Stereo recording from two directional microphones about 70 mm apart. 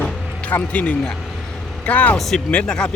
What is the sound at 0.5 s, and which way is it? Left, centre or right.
Speech, left.